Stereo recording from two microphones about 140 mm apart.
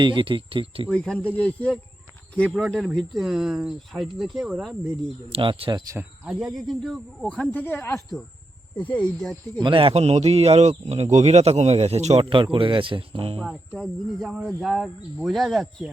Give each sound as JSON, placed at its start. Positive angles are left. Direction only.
{"t": 0.0, "sound": "speech", "side_deg": -35}
{"t": 0.9, "sound": "speech", "side_deg": 5}
{"t": 5.3, "sound": "speech", "side_deg": -40}
{"t": 5.9, "sound": "speech", "side_deg": -10}
{"t": 9.6, "sound": "speech", "side_deg": -40}
{"t": 12.3, "sound": "speech", "side_deg": -40}
{"t": 13.4, "sound": "speech", "side_deg": 5}